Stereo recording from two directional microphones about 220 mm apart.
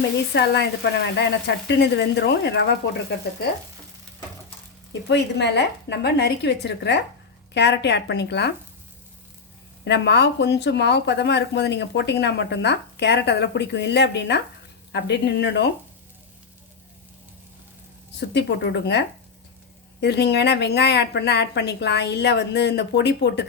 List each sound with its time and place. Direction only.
0.3 s speech: 50° left (ahead or behind)
4.9 s speech: 55° left (ahead or behind)
9.8 s speech: 50° left (ahead or behind)
18.2 s speech: 50° left (ahead or behind)